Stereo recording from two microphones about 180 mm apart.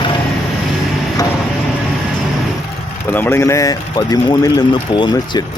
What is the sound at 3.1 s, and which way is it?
Speech, 15° left (ahead or behind).